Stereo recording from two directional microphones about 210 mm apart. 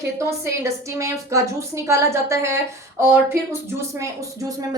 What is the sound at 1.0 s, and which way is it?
Speech, 15° right (ahead or behind).